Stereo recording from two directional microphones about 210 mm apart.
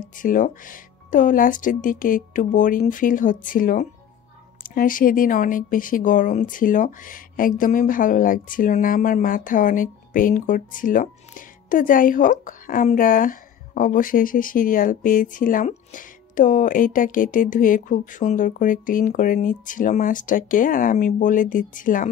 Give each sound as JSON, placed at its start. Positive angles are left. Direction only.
{"t": 0.0, "sound": "speech", "side_deg": 40}